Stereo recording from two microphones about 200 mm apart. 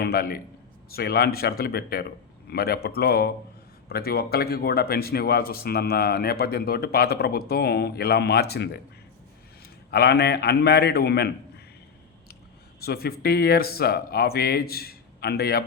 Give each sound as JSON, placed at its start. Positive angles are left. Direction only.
{"t": 0.0, "sound": "a man's voice", "side_deg": 50}
{"t": 9.9, "sound": "a man's voice", "side_deg": 55}
{"t": 12.8, "sound": "a man's voice", "side_deg": 50}